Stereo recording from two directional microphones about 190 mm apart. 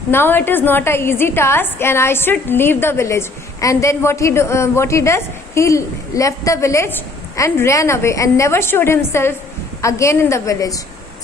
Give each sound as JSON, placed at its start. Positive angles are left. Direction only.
{"t": 0.1, "sound": "a woman's voice", "side_deg": 10}